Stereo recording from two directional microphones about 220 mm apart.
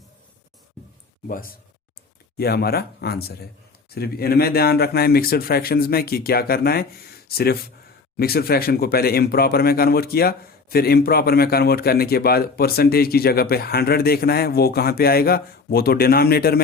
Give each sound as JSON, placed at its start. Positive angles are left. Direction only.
{"t": 2.4, "sound": "speech", "side_deg": 45}